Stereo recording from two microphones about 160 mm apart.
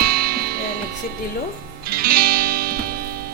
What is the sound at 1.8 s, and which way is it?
Music, 70° right (ahead or behind).